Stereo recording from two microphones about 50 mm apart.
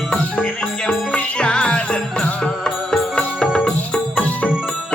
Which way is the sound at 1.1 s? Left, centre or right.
Left.